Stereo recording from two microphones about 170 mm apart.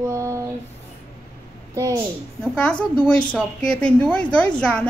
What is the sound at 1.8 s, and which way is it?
Speech, 20° right (ahead or behind).